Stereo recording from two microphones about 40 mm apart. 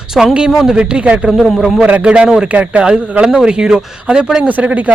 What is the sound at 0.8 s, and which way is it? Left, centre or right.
Speech, right.